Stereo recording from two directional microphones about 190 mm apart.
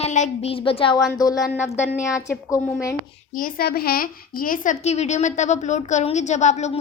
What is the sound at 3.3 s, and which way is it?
A woman's voice, 45° left (ahead or behind).